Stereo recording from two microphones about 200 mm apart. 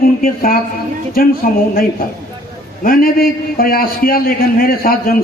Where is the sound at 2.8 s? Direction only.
45° left (ahead or behind).